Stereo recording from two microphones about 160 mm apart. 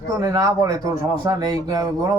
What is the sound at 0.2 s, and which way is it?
Speech, 20° right (ahead or behind).